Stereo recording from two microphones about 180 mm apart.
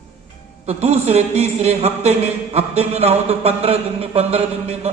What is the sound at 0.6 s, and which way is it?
A man's voice, 35° right (ahead or behind).